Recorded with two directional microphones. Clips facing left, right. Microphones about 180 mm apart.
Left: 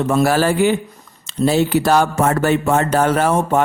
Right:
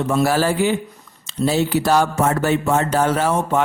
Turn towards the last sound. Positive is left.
turn(degrees=55)  # may be behind; listen again after turning